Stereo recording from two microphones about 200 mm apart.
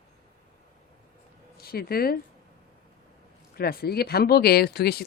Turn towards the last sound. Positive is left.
turn(degrees=50)  # may be behind; listen again after turning